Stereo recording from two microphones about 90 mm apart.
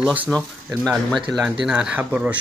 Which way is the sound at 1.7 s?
5° right (ahead or behind).